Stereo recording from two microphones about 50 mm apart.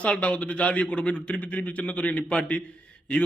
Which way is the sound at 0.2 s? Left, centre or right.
Left.